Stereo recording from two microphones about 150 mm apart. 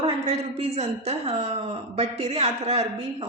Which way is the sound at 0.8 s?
45° right (ahead or behind).